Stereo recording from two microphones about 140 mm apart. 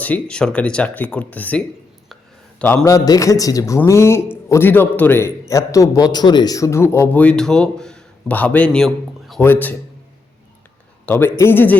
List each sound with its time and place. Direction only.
0.0 s a man's voice: 10° left (ahead or behind)
2.8 s a man's voice: 25° left (ahead or behind); by 9.4 s centre (ahead or behind)
9.4 s a man's voice: 15° left (ahead or behind)
11.0 s a man's voice: 15° left (ahead or behind)